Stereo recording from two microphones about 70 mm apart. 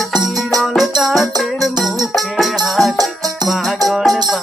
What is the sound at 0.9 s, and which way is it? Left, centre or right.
Music, centre.